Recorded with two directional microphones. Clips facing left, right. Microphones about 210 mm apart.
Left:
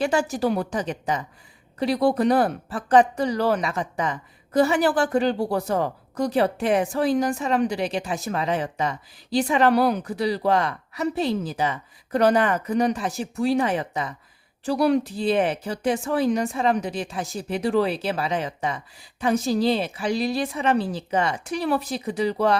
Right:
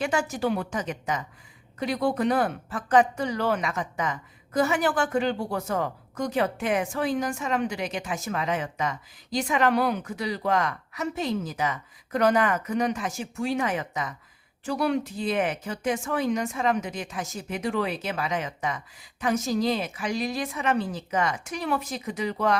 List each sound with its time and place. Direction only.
0.0 s speech: 35° left (ahead or behind)